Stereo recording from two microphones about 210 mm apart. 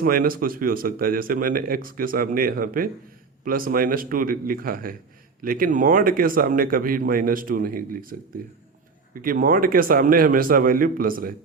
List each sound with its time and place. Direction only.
0.0 s speech: 45° right (ahead or behind)